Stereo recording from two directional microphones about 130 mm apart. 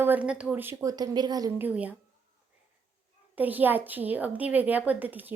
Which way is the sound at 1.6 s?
10° right (ahead or behind).